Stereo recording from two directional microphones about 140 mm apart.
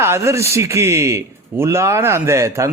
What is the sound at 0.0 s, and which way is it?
A man's voice, 20° right (ahead or behind).